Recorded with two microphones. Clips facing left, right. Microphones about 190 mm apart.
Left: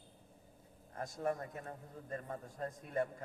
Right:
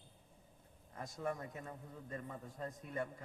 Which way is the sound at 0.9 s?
45° left (ahead or behind).